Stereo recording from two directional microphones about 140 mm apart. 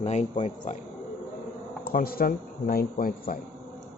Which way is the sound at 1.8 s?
90° left.